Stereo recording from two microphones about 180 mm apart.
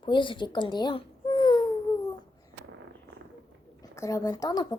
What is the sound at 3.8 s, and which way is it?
Speech, 15° left (ahead or behind).